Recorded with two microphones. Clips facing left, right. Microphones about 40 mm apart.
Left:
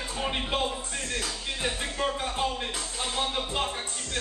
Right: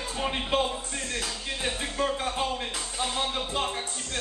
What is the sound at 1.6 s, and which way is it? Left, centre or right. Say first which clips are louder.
Music: right 1 dB; centre.